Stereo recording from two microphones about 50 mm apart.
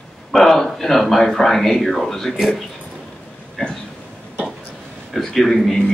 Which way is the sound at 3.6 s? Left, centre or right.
Centre.